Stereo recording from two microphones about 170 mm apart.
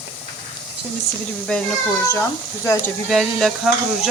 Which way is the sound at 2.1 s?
15° left (ahead or behind).